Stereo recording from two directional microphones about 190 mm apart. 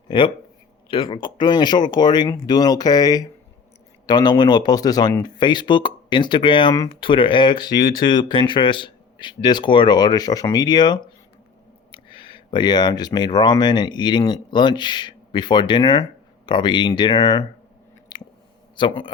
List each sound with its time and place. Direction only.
0.9 s speech: 25° left (ahead or behind)
18.1 s chewing: 20° left (ahead or behind)
18.8 s speech: 25° left (ahead or behind)